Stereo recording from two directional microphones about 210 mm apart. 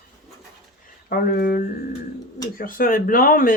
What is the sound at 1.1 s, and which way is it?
Speech, 45° left (ahead or behind).